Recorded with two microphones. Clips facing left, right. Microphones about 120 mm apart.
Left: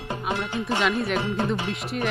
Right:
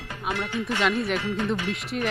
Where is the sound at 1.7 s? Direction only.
Centre (ahead or behind).